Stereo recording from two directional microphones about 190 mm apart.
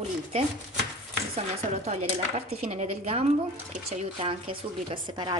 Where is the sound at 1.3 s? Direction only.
35° right (ahead or behind).